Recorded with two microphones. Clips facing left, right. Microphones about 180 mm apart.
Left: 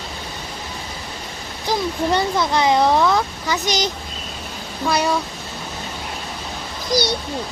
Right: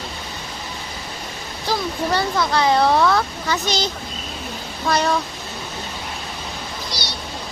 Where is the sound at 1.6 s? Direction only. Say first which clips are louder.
Left 2 dB; 20° left (ahead or behind).